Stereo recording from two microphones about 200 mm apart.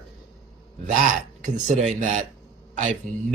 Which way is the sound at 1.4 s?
40° right (ahead or behind).